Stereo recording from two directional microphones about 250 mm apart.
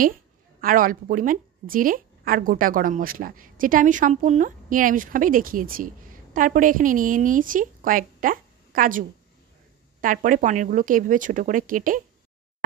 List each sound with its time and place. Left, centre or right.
0.6 s a woman's voice: right